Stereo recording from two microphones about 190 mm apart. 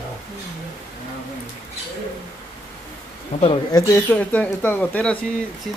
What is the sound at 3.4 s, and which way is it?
Speech, 30° left (ahead or behind).